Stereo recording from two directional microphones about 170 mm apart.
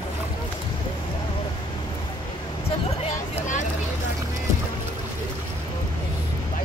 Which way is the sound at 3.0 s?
40° left (ahead or behind).